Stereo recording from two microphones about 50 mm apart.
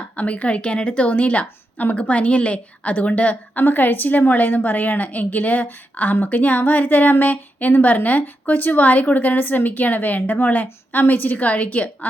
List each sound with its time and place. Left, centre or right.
0.2 s a woman's voice: left
3.6 s a woman's voice: left